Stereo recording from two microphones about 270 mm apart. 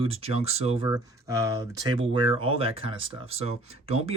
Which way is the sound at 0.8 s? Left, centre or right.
Centre.